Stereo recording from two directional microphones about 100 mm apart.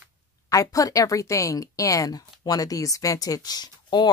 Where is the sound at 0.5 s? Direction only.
35° left (ahead or behind).